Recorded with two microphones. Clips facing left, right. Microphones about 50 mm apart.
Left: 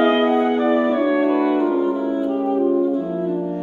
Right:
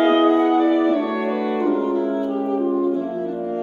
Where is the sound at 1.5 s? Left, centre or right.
Centre.